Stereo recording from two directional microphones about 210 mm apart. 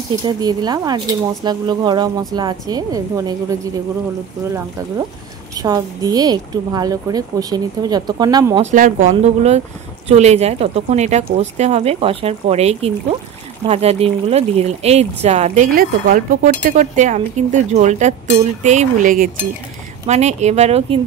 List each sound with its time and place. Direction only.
0.2 s speech: 20° right (ahead or behind)
5.6 s a woman's voice: 20° right (ahead or behind)
8.6 s speech: 40° right (ahead or behind)